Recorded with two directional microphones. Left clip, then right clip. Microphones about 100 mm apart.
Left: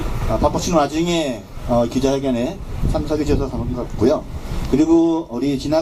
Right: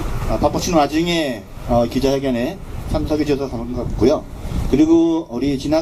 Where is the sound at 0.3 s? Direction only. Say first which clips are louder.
Even; 35° right (ahead or behind).